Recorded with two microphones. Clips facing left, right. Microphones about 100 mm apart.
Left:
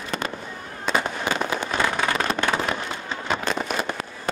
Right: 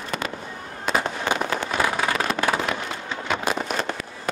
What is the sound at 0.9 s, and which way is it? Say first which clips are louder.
Fireworks: even; centre (ahead or behind).